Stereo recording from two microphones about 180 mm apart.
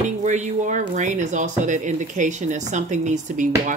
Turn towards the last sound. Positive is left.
turn(degrees=-45)  # may be behind; listen again after turning